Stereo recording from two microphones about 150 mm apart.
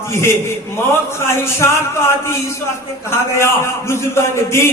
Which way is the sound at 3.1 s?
15° left (ahead or behind).